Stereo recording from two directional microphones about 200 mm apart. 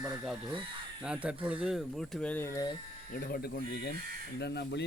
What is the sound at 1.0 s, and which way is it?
Speech, 5° right (ahead or behind).